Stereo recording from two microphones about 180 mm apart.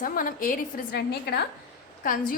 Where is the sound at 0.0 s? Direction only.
50° left (ahead or behind).